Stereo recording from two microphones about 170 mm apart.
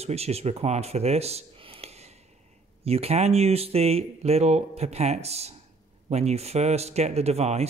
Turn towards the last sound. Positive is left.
turn(degrees=-40)  # may be behind; listen again after turning